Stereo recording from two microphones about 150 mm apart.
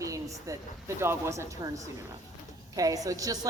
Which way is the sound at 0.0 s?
20° right (ahead or behind).